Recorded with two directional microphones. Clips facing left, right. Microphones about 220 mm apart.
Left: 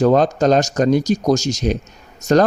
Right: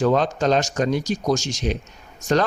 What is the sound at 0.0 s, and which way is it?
Speech, 40° left (ahead or behind).